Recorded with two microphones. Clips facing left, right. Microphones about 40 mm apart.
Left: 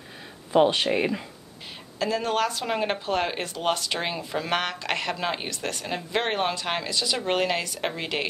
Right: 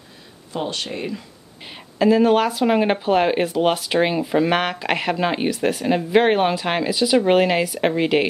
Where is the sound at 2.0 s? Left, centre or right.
Centre.